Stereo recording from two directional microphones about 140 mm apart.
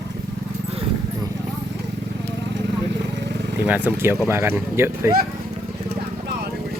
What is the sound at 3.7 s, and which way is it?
Speech, 10° right (ahead or behind).